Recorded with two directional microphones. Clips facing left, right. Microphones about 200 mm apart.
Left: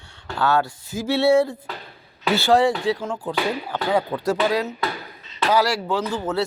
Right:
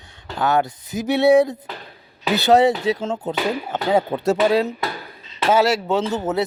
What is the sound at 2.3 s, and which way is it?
Speech, 20° right (ahead or behind).